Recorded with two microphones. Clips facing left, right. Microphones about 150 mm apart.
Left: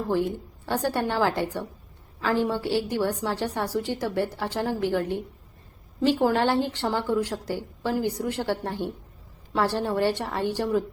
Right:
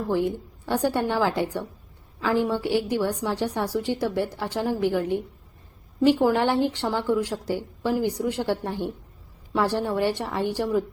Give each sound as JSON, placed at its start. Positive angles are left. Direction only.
{"t": 0.1, "sound": "a woman's voice", "side_deg": -15}
{"t": 6.2, "sound": "a woman's voice", "side_deg": -15}